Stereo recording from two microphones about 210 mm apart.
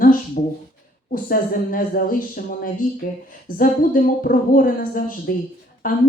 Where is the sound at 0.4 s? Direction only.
40° left (ahead or behind).